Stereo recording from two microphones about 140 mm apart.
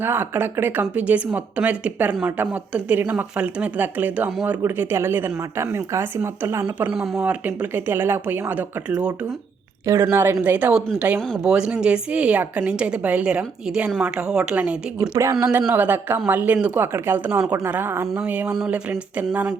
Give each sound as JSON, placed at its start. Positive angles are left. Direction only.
{"t": 0.0, "sound": "a woman's voice", "side_deg": -15}
{"t": 15.1, "sound": "a woman's voice", "side_deg": -20}